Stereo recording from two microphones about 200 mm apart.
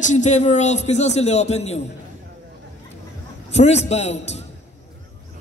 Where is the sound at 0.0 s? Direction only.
35° left (ahead or behind).